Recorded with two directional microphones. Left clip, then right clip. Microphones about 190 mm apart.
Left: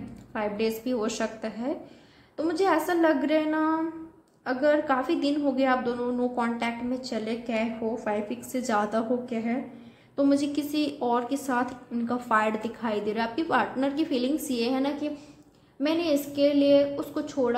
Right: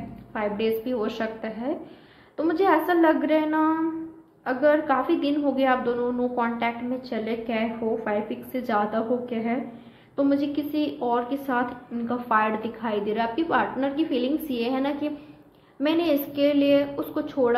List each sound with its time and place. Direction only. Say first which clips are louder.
0.3 s a woman's voice: right 3 dB; 20° left (ahead or behind)